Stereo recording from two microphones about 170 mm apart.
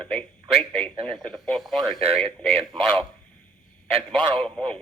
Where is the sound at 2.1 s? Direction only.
35° right (ahead or behind).